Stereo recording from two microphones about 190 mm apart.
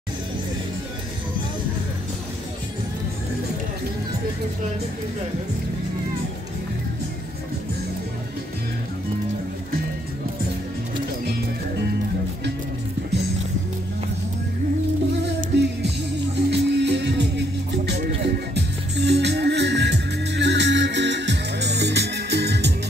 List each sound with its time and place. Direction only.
15.5 s music: 60° right (ahead or behind)